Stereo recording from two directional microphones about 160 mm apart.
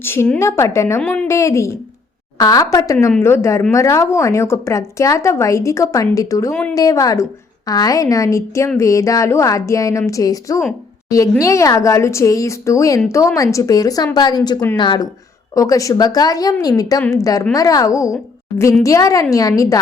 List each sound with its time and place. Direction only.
0.0 s a woman's voice: 15° left (ahead or behind)
6.5 s a woman's voice: 10° left (ahead or behind)
6.7 s speech: 20° left (ahead or behind)